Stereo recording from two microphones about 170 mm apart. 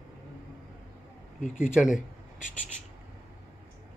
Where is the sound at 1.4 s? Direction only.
50° left (ahead or behind).